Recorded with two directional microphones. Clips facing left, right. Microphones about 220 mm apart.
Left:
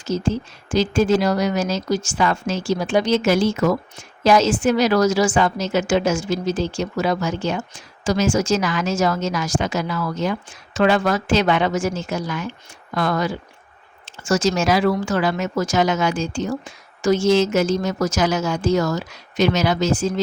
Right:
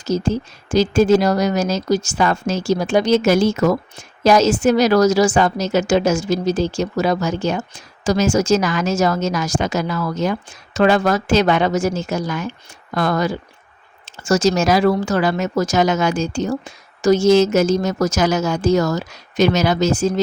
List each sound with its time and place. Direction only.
0.0 s speech: 40° right (ahead or behind)